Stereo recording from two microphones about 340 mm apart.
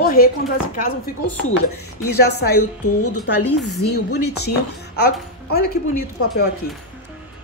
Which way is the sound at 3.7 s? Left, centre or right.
Left.